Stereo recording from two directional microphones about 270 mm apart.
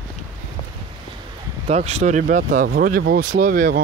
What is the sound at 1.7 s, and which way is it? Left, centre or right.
Speech, right.